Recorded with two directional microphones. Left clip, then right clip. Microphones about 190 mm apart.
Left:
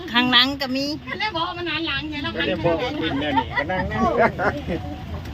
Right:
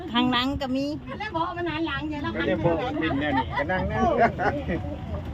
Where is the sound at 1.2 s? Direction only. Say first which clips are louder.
Left 4 dB; 55° right (ahead or behind).